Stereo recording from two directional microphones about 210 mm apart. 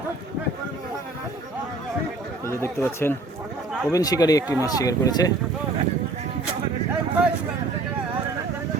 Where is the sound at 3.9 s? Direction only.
15° left (ahead or behind).